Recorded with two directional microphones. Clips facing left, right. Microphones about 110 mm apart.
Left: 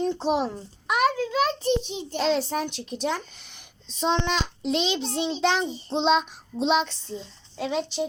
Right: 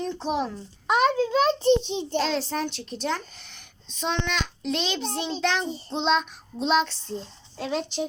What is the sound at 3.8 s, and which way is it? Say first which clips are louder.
A child's voice: left 4 dB; 30° left (ahead or behind).